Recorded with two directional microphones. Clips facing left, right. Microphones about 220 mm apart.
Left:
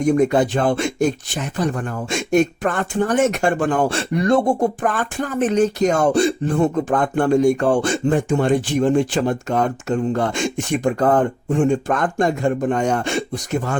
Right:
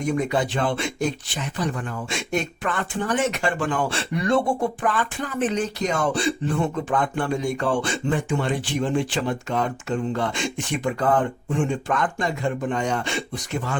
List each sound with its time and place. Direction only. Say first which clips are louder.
0.0 s speech: left 7 dB; 45° left (ahead or behind)